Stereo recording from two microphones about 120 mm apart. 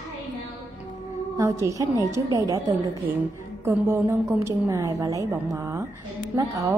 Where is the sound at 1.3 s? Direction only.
25° right (ahead or behind).